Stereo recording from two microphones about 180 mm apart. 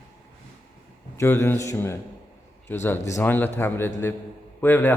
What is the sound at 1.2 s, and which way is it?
A man's voice, 15° left (ahead or behind).